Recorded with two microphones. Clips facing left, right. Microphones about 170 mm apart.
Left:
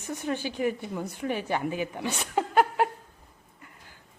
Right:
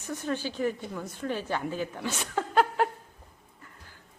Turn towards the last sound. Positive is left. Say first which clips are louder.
# left 1 dB
turn(degrees=10)  # may be behind; listen again after turning